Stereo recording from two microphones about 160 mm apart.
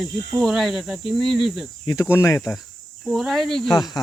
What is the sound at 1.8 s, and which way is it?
Speech, 20° left (ahead or behind).